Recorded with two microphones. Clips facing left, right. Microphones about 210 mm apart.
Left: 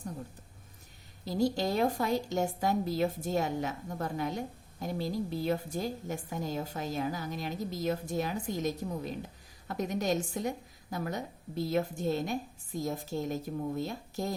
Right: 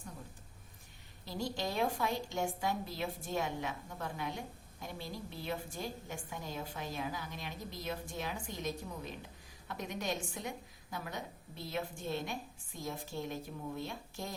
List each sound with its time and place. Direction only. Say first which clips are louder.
1.2 s a woman's voice: left 9 dB; 40° left (ahead or behind)